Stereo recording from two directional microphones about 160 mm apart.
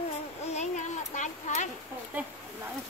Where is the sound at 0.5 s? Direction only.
45° left (ahead or behind).